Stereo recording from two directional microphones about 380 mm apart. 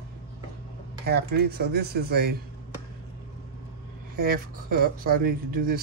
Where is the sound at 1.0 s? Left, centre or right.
Right.